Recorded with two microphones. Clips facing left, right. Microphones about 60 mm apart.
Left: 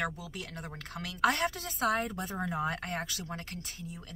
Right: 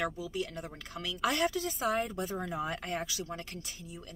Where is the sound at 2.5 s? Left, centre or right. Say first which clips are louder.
Left 2 dB; left.